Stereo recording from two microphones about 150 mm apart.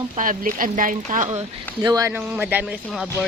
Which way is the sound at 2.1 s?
10° right (ahead or behind).